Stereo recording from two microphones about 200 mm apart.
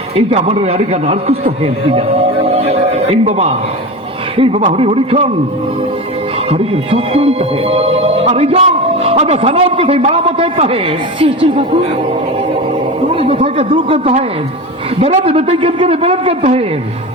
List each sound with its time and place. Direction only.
0.2 s a man's voice: 30° right (ahead or behind)
3.2 s a man's voice: 30° right (ahead or behind)
6.5 s speech: 30° right (ahead or behind)
13.1 s speech: 30° right (ahead or behind)